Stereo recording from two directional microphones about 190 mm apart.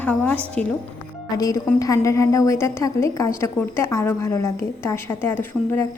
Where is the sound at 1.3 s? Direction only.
20° left (ahead or behind).